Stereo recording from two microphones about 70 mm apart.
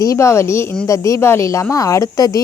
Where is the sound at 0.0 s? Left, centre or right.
Left.